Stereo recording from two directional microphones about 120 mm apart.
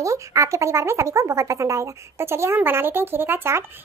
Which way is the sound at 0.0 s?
25° right (ahead or behind).